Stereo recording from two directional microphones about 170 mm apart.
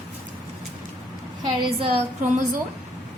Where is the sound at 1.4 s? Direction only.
30° right (ahead or behind).